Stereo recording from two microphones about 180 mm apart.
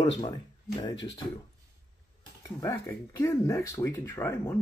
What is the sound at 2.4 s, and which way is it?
Speech, 20° left (ahead or behind).